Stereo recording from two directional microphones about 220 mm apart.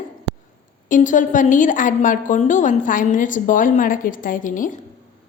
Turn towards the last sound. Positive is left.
turn(degrees=35)  # may be behind; listen again after turning